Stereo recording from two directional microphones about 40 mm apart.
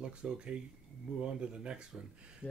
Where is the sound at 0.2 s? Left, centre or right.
Right.